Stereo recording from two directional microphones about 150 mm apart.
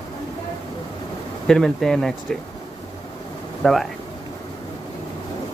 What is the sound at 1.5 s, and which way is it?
Speech, centre (ahead or behind).